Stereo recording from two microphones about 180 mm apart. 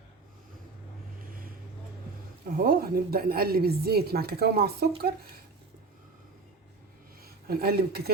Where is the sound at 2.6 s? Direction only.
55° right (ahead or behind).